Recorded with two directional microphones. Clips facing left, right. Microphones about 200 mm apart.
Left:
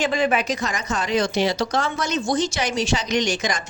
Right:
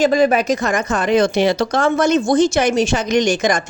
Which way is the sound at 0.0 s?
40° right (ahead or behind).